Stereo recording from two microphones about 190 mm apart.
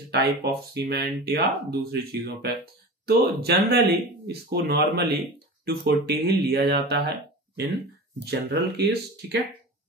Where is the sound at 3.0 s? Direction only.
55° right (ahead or behind).